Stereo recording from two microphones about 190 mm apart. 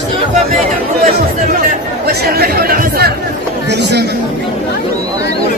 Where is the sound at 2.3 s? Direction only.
50° right (ahead or behind).